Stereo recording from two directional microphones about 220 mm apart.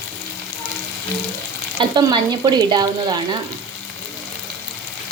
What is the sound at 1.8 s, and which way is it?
A woman's voice, 20° right (ahead or behind).